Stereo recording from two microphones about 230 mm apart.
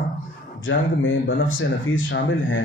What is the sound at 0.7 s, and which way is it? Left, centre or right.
Speech, left.